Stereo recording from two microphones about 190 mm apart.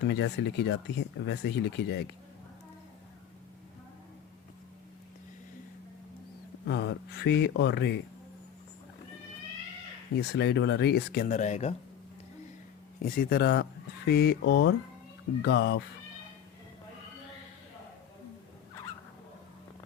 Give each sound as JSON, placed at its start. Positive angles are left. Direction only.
{"t": 0.1, "sound": "speech", "side_deg": 65}
{"t": 6.7, "sound": "speech", "side_deg": 65}
{"t": 10.2, "sound": "speech", "side_deg": 60}
{"t": 13.1, "sound": "speech", "side_deg": 55}